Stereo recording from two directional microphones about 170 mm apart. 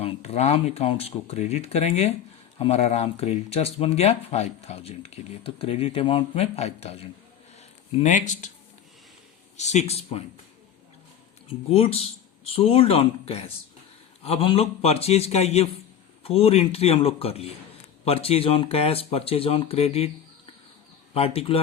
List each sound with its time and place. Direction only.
0.0 s speech: 40° left (ahead or behind)
7.9 s speech: 45° left (ahead or behind)
9.6 s speech: 40° left (ahead or behind)
11.7 s speech: 35° left (ahead or behind)
21.1 s speech: 35° left (ahead or behind)